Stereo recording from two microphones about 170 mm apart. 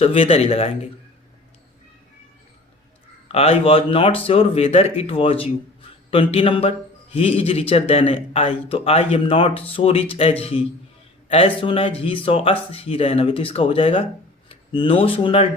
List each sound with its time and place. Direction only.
0.0 s speech: 35° left (ahead or behind)
3.3 s speech: 35° left (ahead or behind)